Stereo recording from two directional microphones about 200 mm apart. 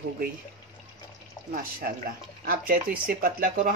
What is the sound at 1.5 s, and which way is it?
Speech, 45° right (ahead or behind).